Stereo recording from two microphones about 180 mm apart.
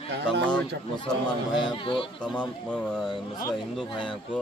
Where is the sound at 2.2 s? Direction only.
5° left (ahead or behind).